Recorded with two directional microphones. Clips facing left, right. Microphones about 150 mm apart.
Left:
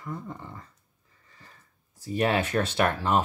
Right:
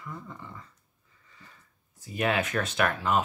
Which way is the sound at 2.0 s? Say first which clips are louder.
Left 3 dB; 35° left (ahead or behind).